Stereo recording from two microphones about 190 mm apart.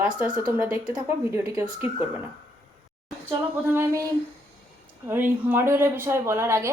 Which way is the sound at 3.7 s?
15° right (ahead or behind).